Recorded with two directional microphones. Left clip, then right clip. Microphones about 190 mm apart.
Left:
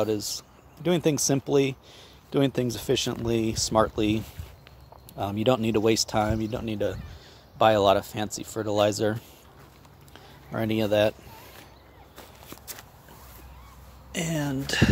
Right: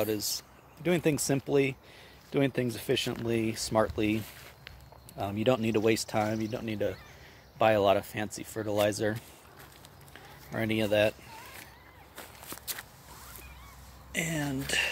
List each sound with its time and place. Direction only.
0.0 s speech: 20° left (ahead or behind)
10.1 s speech: 15° left (ahead or behind)
12.2 s walk: 10° left (ahead or behind)
14.1 s speech: 20° left (ahead or behind)